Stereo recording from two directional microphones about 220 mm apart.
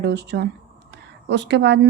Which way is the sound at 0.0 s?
50° right (ahead or behind).